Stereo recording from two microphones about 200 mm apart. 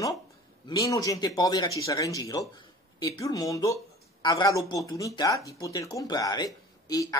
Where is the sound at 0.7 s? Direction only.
20° left (ahead or behind).